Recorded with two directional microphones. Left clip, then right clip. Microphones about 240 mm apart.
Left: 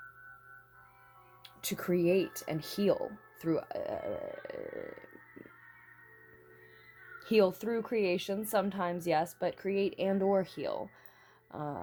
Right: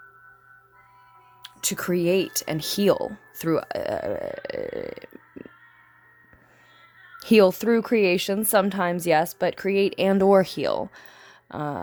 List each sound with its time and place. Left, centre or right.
1.4 s speech: right
7.2 s speech: right